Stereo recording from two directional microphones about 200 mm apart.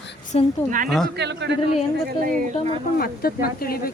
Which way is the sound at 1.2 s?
60° right (ahead or behind).